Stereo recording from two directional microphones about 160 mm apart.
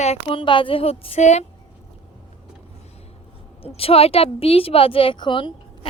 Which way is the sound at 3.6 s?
35° left (ahead or behind).